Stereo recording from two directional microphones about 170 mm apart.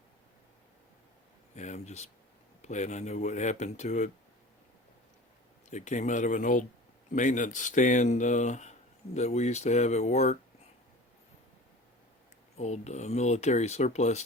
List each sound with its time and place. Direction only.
1.5 s speech: 45° left (ahead or behind)
5.7 s speech: 45° left (ahead or behind)
12.5 s speech: 40° left (ahead or behind)